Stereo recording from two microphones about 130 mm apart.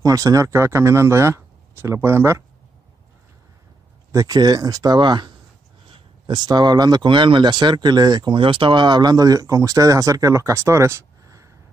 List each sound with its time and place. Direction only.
0.0 s speech: 25° right (ahead or behind)
4.1 s speech: 30° right (ahead or behind)